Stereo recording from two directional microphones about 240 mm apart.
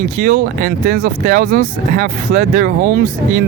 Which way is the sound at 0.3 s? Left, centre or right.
Right.